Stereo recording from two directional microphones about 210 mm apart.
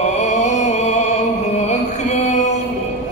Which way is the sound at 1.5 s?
35° left (ahead or behind).